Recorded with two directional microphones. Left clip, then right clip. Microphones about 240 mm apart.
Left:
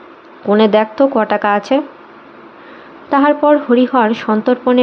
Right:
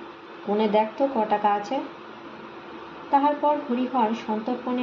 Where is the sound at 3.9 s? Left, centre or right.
Left.